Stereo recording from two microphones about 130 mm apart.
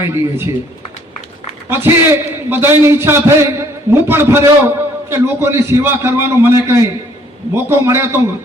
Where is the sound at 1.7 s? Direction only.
15° right (ahead or behind).